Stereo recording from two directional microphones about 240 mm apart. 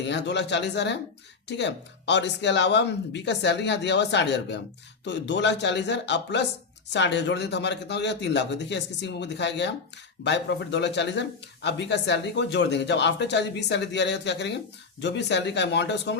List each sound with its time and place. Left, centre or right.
0.1 s speech: left